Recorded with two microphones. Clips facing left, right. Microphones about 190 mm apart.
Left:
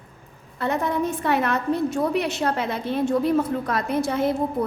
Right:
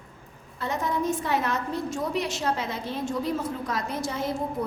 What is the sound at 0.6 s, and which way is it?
A woman's voice, 60° left (ahead or behind).